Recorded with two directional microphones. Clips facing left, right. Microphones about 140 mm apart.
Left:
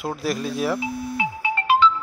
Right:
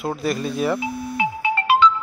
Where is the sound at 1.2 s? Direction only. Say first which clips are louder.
Right 6 dB; 70° right (ahead or behind).